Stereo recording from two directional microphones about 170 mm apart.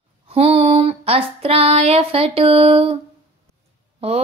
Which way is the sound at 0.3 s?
35° right (ahead or behind).